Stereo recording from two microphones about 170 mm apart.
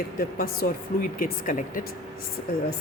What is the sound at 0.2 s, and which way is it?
A woman's voice, 60° left (ahead or behind).